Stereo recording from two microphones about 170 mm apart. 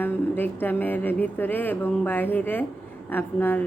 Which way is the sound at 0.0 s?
10° left (ahead or behind).